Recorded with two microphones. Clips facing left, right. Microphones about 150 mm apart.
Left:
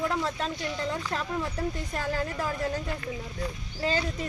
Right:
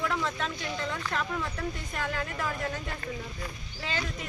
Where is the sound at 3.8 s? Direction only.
35° left (ahead or behind).